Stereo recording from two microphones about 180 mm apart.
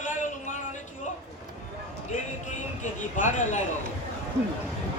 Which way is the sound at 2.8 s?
45° left (ahead or behind).